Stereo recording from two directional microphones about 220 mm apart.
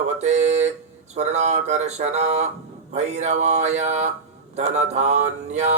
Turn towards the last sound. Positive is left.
turn(degrees=-30)  # may be behind; listen again after turning